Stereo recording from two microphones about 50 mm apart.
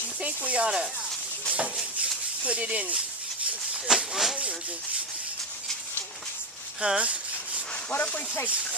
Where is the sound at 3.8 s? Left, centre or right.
Centre.